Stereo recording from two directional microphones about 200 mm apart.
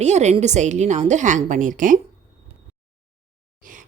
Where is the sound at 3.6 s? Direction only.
40° right (ahead or behind).